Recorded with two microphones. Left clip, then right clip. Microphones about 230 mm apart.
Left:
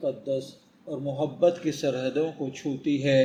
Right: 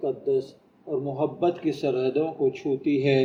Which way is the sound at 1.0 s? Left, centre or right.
Left.